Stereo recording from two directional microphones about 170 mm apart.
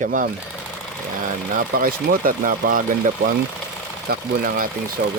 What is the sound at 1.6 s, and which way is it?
Speech, 60° right (ahead or behind).